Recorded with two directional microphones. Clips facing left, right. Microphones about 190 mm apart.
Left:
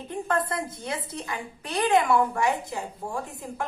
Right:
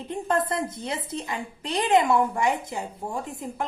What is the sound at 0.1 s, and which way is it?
A woman's voice, 25° right (ahead or behind).